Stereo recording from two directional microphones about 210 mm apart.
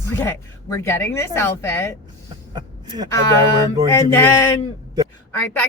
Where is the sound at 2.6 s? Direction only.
20° right (ahead or behind).